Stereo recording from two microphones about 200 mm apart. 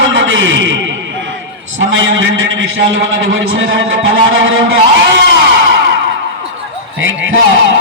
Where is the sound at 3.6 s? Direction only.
85° right.